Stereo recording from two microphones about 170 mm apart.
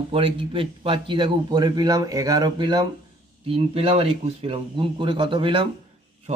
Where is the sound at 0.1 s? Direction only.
30° right (ahead or behind).